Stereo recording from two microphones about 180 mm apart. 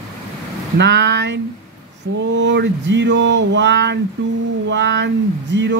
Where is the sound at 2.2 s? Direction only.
85° right.